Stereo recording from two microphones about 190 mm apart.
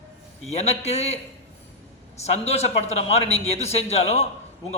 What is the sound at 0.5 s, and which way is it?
A man's voice, 35° left (ahead or behind).